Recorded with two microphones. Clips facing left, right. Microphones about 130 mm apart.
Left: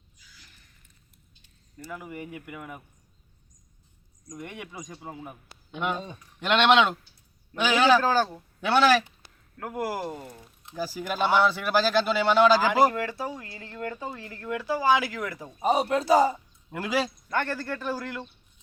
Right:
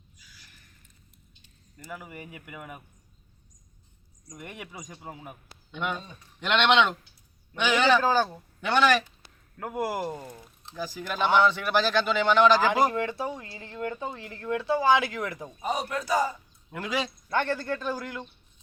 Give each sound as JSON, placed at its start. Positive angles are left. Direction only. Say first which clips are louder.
{"t": 1.9, "sound": "speech", "louder": "left 3 dB", "side_deg": -5}
{"t": 4.3, "sound": "speech", "louder": "left 3 dB", "side_deg": -10}
{"t": 4.7, "sound": "a man's voice", "louder": "left 2 dB", "side_deg": 25}
{"t": 5.0, "sound": "speech", "louder": "left 1 dB", "side_deg": -15}
{"t": 5.7, "sound": "speech", "louder": "left 2 dB", "side_deg": 5}
{"t": 8.0, "sound": "speech", "louder": "even", "side_deg": -15}
{"t": 8.3, "sound": "speech", "louder": "left 2 dB", "side_deg": 5}
{"t": 9.6, "sound": "speech", "louder": "right 1 dB", "side_deg": -20}
{"t": 10.8, "sound": "speech", "louder": "left 2 dB", "side_deg": 10}
{"t": 12.9, "sound": "speech", "louder": "right 1 dB", "side_deg": -25}
{"t": 15.6, "sound": "a man's voice", "louder": "left 7 dB", "side_deg": 25}
{"t": 16.7, "sound": "speech", "louder": "left 3 dB", "side_deg": 5}
{"t": 17.2, "sound": "speech", "louder": "right 2 dB", "side_deg": -20}